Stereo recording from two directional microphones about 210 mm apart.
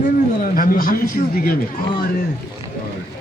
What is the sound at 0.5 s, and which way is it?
Speech, 40° left (ahead or behind).